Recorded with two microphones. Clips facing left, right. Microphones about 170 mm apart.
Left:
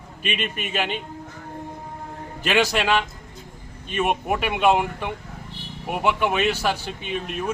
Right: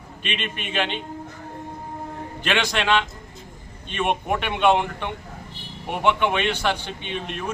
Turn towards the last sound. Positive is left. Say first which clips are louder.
# left 2 dB
turn(degrees=5)  # may be behind; listen again after turning